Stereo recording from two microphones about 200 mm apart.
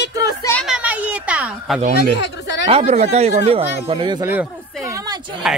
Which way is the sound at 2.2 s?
60° left (ahead or behind).